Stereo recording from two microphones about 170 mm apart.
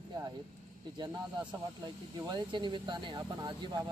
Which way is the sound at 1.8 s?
25° right (ahead or behind).